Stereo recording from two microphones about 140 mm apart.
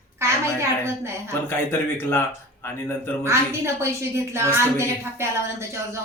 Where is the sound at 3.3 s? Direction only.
20° right (ahead or behind).